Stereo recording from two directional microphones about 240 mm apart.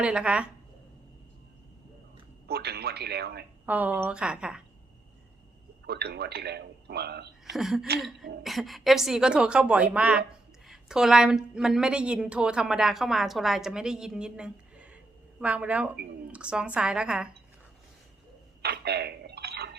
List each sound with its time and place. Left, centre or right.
0.0 s a woman's voice: centre
2.5 s a man's voice: right
3.7 s a woman's voice: centre
5.8 s a man's voice: right
7.5 s a woman's voice: centre
18.6 s a sound: right